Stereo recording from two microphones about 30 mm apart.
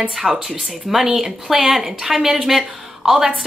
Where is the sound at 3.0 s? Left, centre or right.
Right.